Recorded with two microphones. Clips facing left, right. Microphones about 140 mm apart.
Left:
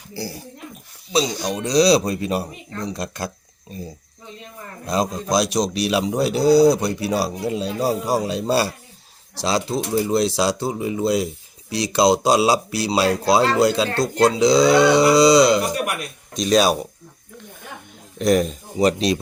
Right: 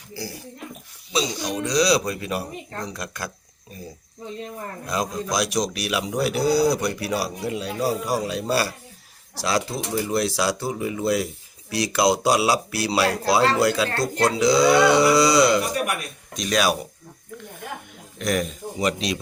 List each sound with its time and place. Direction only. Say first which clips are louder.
1.1 s speech: left 4 dB; 30° left (ahead or behind)
4.9 s speech: left 5 dB; 30° left (ahead or behind)
18.2 s speech: left 7 dB; 35° left (ahead or behind)